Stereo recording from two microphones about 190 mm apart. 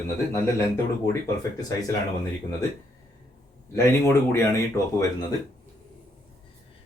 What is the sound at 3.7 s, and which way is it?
Speech, 15° left (ahead or behind).